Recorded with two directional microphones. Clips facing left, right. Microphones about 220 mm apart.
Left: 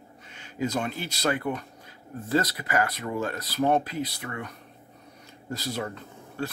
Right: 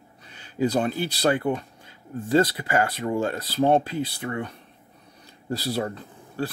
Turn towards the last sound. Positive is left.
turn(degrees=-35)  # may be behind; listen again after turning